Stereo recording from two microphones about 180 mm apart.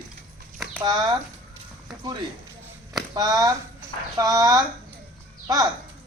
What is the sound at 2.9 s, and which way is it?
Speech, 20° right (ahead or behind).